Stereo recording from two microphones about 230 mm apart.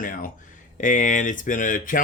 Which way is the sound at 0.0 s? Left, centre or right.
Left.